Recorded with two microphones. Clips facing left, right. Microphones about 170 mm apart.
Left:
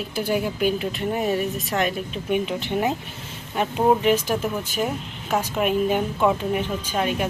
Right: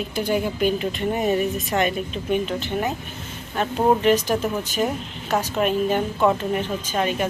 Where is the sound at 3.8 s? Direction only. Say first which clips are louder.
Right 1 dB; 5° left (ahead or behind).